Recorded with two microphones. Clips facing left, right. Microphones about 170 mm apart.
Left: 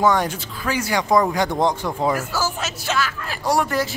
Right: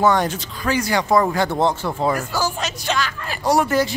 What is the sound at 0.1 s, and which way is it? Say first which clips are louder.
Speech: right 1 dB; 10° left (ahead or behind).